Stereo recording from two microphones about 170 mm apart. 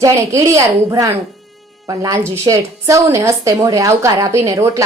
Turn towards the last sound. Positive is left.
turn(degrees=-20)  # may be behind; listen again after turning